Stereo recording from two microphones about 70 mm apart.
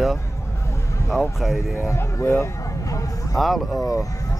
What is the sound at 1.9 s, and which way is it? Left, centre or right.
Speech, left.